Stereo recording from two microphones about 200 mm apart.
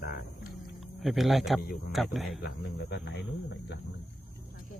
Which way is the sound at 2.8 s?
60° left (ahead or behind).